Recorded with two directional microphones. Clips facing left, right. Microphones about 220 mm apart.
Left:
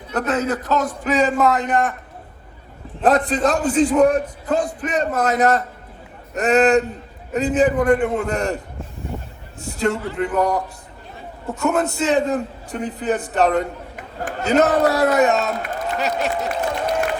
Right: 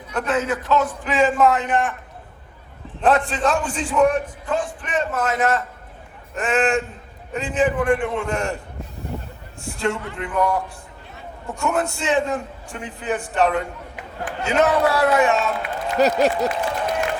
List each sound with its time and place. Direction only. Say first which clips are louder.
0.1 s a man's voice: left 2 dB; 40° left (ahead or behind)
3.0 s a man's voice: left 2 dB; 40° left (ahead or behind)
11.6 s a man's voice: left 3 dB; 40° left (ahead or behind)
15.9 s speech: right 6 dB; 40° right (ahead or behind)